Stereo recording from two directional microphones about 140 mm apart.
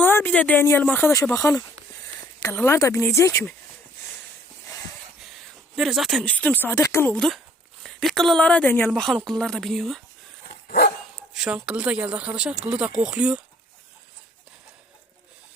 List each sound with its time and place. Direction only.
0.0 s speech: 15° left (ahead or behind)
5.2 s speech: centre (ahead or behind); by 7.1 s 20° left (ahead or behind)
7.1 s a woman's voice: 5° left (ahead or behind)
10.7 s dog: 90° left
11.3 s speech: 5° right (ahead or behind)